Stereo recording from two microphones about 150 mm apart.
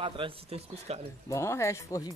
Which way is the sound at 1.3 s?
20° left (ahead or behind).